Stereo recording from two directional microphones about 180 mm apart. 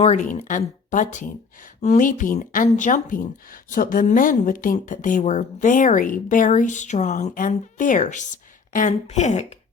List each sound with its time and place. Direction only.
0.0 s speech: 40° left (ahead or behind)